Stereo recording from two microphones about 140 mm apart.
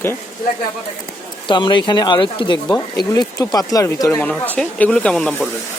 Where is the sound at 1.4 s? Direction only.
35° left (ahead or behind).